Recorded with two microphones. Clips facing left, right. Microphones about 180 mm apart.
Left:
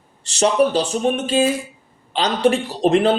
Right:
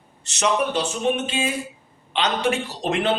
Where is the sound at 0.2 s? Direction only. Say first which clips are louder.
Left 6 dB; 35° left (ahead or behind).